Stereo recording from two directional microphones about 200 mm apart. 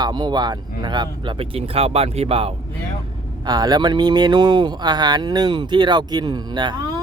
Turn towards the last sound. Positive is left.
turn(degrees=-20)  # may be behind; listen again after turning